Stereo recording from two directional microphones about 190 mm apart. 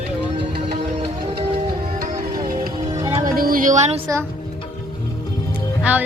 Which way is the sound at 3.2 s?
50° right (ahead or behind).